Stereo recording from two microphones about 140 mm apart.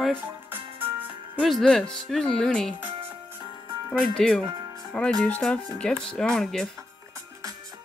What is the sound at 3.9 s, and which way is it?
Speech, 5° left (ahead or behind).